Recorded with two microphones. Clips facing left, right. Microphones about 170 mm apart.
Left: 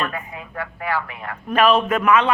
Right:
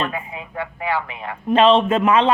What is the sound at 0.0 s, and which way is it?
Speech, 25° right (ahead or behind).